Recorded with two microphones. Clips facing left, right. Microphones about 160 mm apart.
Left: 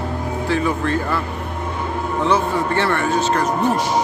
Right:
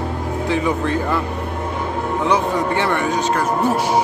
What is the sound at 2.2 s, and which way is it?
Speech, 15° right (ahead or behind).